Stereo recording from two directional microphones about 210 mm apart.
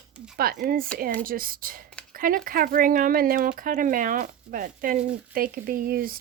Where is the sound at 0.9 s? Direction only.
45° right (ahead or behind).